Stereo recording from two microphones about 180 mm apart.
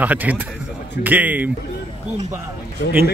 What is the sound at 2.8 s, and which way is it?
Speech, 60° left (ahead or behind).